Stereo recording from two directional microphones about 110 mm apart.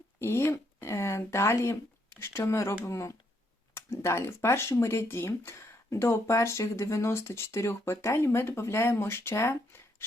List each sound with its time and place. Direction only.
0.2 s speech: 25° left (ahead or behind)